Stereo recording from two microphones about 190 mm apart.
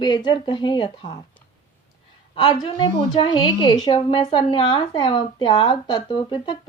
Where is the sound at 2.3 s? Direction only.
25° left (ahead or behind).